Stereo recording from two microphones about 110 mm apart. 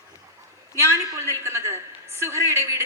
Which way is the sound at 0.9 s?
25° right (ahead or behind).